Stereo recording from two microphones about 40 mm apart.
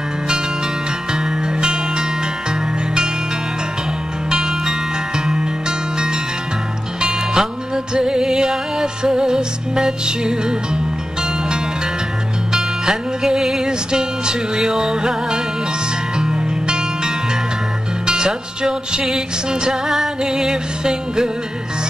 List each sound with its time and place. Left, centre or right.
1.1 s music: centre
4.3 s music: centre
12.5 s music: centre